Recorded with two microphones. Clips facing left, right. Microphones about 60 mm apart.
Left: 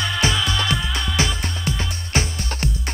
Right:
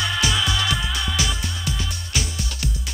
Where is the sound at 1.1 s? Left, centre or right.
Left.